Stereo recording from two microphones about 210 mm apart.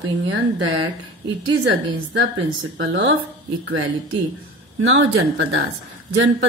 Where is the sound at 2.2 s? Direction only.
65° right (ahead or behind).